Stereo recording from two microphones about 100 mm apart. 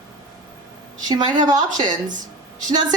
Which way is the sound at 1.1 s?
45° right (ahead or behind).